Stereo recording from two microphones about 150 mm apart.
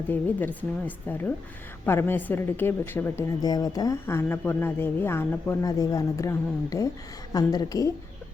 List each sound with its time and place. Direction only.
0.1 s a woman's voice: 10° left (ahead or behind)
3.4 s speech: 25° left (ahead or behind)